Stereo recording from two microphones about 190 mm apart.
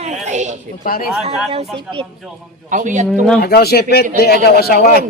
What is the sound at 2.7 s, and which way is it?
Speech, 40° right (ahead or behind).